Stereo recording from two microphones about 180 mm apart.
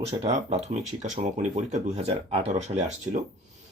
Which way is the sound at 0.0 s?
35° right (ahead or behind).